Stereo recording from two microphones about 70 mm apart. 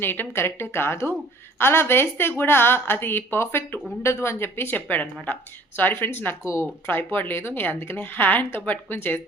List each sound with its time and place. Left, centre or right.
0.0 s speech: left
6.4 s speech: left
6.8 s speech: left